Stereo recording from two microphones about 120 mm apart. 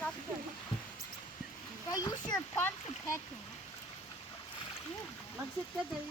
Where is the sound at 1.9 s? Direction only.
30° left (ahead or behind).